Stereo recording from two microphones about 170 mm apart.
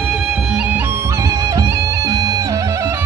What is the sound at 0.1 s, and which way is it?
Music, 5° right (ahead or behind).